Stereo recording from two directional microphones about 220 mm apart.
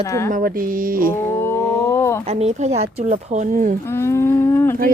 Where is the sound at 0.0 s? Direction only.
15° left (ahead or behind).